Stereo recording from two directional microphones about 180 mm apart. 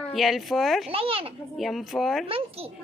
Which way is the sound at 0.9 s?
30° right (ahead or behind).